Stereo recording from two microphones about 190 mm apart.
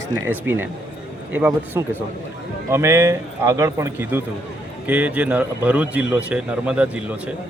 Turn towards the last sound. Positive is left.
turn(degrees=-5)  # may be behind; listen again after turning